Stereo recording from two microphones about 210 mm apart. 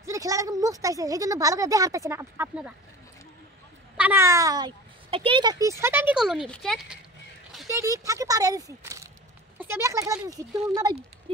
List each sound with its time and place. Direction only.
0.0 s speech: 15° right (ahead or behind)
3.9 s speech: 10° right (ahead or behind)
7.6 s speech: 15° right (ahead or behind)